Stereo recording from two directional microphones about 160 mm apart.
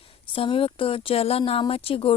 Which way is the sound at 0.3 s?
35° left (ahead or behind).